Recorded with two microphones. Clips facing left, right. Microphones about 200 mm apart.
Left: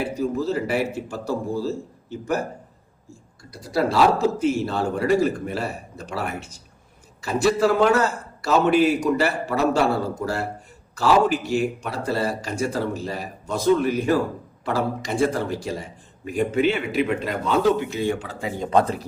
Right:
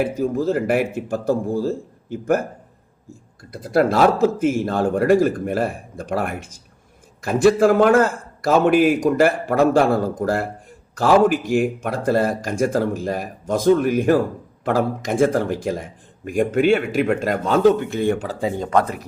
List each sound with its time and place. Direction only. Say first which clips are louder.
0.2 s a man's voice: right 3 dB; 50° right (ahead or behind)
3.5 s a man's voice: right 4 dB; 55° right (ahead or behind); by 18.5 s 35° right (ahead or behind)
18.7 s speech: left 2 dB; 30° left (ahead or behind)